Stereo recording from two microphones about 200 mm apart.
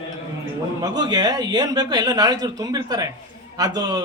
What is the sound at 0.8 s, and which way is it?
A man's voice, 20° right (ahead or behind).